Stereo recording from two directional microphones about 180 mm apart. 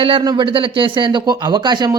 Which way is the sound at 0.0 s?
25° right (ahead or behind).